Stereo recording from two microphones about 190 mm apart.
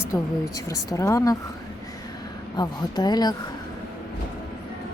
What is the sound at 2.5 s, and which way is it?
Speech, 20° left (ahead or behind).